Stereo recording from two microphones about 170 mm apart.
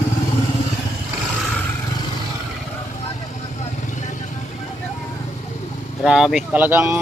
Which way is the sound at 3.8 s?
45° left (ahead or behind).